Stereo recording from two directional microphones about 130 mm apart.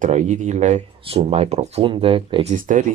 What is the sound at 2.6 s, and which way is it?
Speech, 80° right.